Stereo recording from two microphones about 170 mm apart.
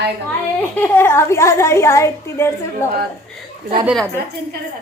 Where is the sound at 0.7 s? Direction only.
15° left (ahead or behind).